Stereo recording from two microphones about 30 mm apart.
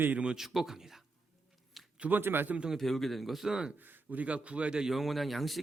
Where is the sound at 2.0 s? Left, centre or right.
Right.